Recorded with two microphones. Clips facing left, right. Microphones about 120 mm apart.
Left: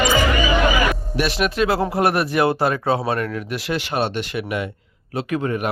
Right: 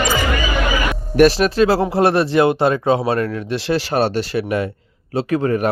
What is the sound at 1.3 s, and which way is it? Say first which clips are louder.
Speech: right 5 dB; 35° right (ahead or behind).